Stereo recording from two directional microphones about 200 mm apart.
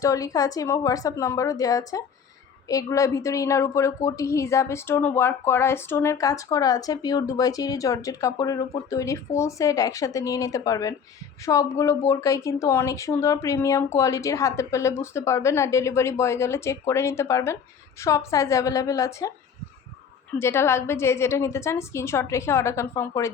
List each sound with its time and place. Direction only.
0.0 s a woman's voice: 15° left (ahead or behind)
20.4 s a woman's voice: 10° left (ahead or behind)